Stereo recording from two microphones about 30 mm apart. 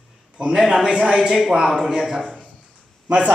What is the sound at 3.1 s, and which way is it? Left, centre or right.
Speech, right.